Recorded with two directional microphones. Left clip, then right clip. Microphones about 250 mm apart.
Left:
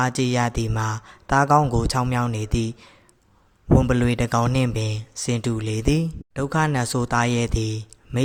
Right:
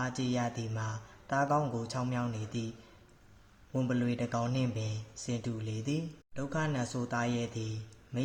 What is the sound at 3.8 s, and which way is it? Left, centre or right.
Speech, left.